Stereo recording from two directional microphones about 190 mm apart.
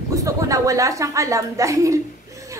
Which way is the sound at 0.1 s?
15° right (ahead or behind).